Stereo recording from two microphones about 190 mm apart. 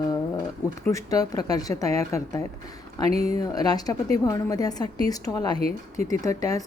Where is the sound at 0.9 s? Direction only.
20° left (ahead or behind).